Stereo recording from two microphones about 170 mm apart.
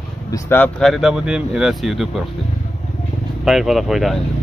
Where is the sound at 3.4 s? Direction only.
Centre (ahead or behind).